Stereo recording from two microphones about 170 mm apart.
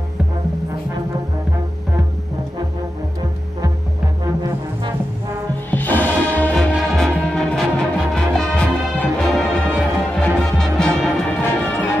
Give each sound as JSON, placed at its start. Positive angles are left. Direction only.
{"t": 5.7, "sound": "music", "side_deg": 10}